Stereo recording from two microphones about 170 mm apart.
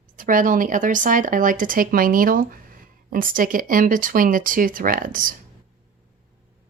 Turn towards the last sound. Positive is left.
turn(degrees=-55)  # may be behind; listen again after turning